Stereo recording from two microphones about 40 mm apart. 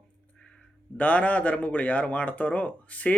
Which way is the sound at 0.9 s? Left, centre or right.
Left.